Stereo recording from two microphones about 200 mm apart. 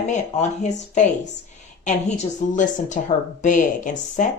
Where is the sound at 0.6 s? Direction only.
35° left (ahead or behind).